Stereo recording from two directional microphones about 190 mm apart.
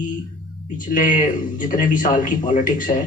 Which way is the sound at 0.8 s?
45° left (ahead or behind).